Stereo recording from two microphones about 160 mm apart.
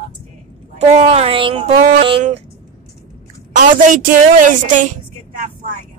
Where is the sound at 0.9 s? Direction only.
40° right (ahead or behind).